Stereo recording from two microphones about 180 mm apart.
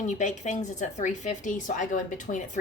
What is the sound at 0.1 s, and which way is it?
Speech, 40° left (ahead or behind).